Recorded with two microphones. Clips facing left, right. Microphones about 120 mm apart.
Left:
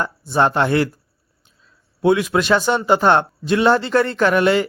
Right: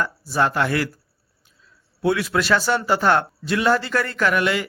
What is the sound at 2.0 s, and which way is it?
A man's voice, 20° left (ahead or behind).